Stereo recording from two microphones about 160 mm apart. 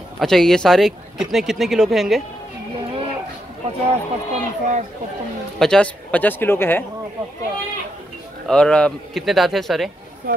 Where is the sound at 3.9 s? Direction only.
50° right (ahead or behind).